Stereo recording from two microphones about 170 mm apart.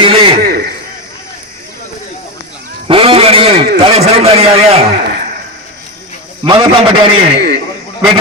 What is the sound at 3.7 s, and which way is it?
A man's voice, 40° right (ahead or behind).